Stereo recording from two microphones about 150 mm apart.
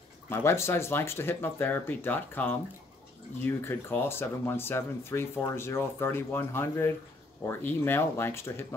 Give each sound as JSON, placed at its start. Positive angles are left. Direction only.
{"t": 0.3, "sound": "speech", "side_deg": 15}